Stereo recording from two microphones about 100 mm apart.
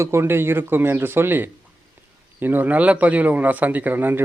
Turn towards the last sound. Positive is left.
turn(degrees=-20)  # may be behind; listen again after turning